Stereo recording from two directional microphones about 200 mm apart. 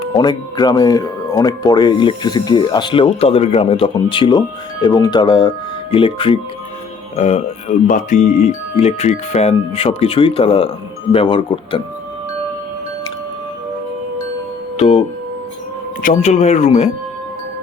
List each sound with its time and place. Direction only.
0.0 s speech: 20° left (ahead or behind)
14.8 s speech: 30° left (ahead or behind)
16.0 s speech: 35° left (ahead or behind)